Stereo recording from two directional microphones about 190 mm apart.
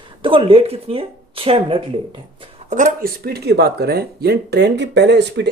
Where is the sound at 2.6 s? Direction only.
40° right (ahead or behind).